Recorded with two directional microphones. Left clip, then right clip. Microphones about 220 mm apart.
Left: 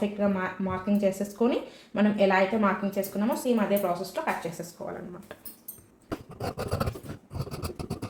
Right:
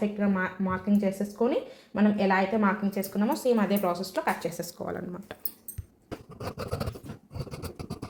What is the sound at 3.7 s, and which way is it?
A woman's voice, 50° right (ahead or behind).